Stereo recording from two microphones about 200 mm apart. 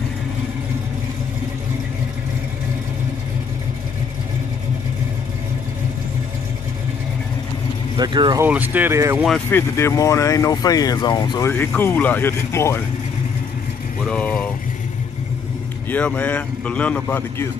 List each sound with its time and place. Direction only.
8.0 s speech: 20° right (ahead or behind)
8.5 s speech: 10° right (ahead or behind)
9.5 s speech: 10° left (ahead or behind)
11.5 s speech: 10° left (ahead or behind)
14.0 s speech: 5° left (ahead or behind)
15.9 s speech: 5° left (ahead or behind)